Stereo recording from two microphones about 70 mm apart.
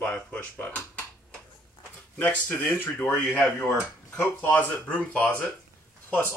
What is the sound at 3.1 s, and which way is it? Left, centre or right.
Speech, centre.